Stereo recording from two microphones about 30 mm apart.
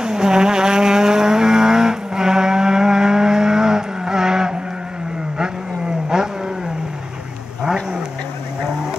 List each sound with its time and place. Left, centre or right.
0.0 s vehicle: right
6.0 s vehicle: right